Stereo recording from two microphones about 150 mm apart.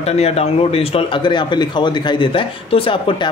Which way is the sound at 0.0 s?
45° left (ahead or behind).